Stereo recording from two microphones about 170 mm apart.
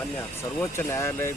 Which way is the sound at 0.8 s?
15° left (ahead or behind).